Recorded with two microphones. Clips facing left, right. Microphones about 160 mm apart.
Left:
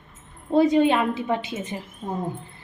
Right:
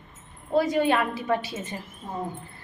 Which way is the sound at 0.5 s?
20° left (ahead or behind).